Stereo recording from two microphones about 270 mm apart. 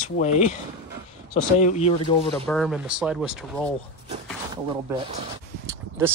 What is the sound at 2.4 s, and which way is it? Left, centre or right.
Speech, centre.